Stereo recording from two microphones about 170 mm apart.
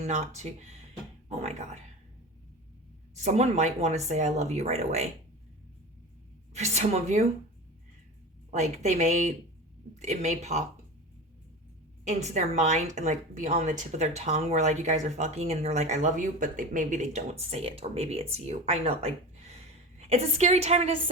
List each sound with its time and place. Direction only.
0.0 s a woman's voice: 40° right (ahead or behind)
3.2 s a woman's voice: 40° right (ahead or behind)
6.5 s a woman's voice: 40° right (ahead or behind)
8.4 s a woman's voice: 40° right (ahead or behind)
12.0 s a woman's voice: 40° right (ahead or behind)